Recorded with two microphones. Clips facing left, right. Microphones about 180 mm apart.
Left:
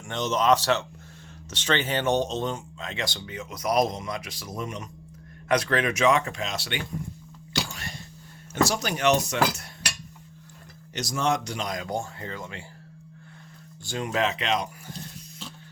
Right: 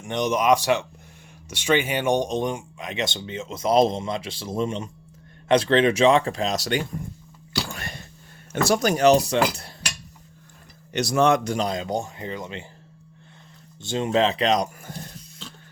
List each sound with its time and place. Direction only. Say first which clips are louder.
0.0 s speech: right 3 dB; 15° right (ahead or behind); by 6.8 s 40° right (ahead or behind)
7.7 s a sound: right 3 dB; 55° right (ahead or behind)
8.6 s speech: right 6 dB; 50° right (ahead or behind); by 9.4 s 35° right (ahead or behind)
10.9 s speech: right 7 dB; 65° right (ahead or behind)
11.6 s speech: right 4 dB; 25° right (ahead or behind)
13.8 s speech: right 6 dB; 25° right (ahead or behind)